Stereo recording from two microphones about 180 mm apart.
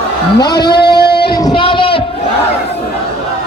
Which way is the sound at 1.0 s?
65° left (ahead or behind).